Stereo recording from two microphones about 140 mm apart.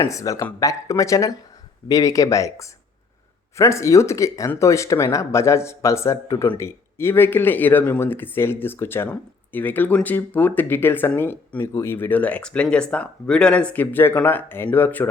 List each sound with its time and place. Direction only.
0.0 s speech: 20° left (ahead or behind)